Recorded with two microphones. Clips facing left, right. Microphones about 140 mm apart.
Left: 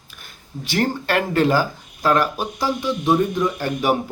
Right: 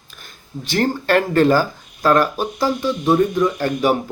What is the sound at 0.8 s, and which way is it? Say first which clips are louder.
Speech: right 4 dB; 15° left (ahead or behind).